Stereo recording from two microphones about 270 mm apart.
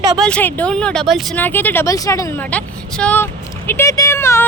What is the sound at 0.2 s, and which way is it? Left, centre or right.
Speech, centre.